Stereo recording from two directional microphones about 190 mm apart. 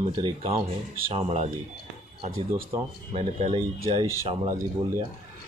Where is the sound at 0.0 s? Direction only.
30° right (ahead or behind).